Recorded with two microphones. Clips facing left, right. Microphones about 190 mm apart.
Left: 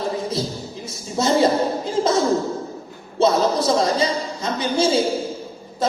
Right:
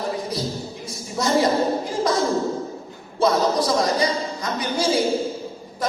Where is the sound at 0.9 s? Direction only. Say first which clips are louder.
Left 3 dB; 25° left (ahead or behind).